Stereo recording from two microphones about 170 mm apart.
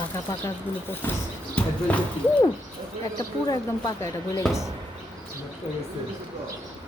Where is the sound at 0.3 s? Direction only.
15° left (ahead or behind).